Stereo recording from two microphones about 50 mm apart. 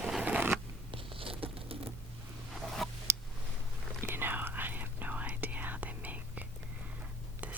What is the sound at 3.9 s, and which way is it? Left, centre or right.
Whispering, right.